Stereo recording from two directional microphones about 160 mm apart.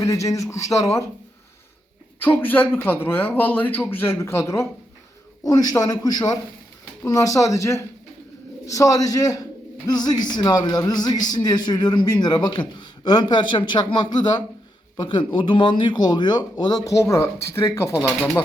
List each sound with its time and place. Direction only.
0.0 s speech: 20° left (ahead or behind)
2.1 s speech: 10° left (ahead or behind)